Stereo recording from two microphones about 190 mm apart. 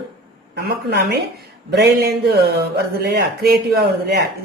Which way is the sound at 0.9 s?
60° right (ahead or behind).